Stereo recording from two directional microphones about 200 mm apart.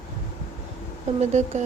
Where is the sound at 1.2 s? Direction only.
35° right (ahead or behind).